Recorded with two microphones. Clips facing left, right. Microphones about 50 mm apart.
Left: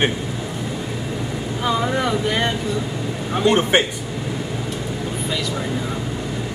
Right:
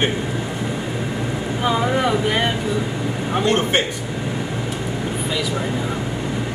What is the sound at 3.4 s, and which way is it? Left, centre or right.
Speech, centre.